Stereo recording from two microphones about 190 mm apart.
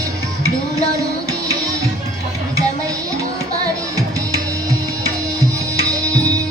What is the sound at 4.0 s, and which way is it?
Music, 20° right (ahead or behind).